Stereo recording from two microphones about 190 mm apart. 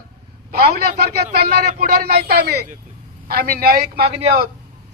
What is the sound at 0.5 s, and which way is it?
A man's voice, 55° right (ahead or behind).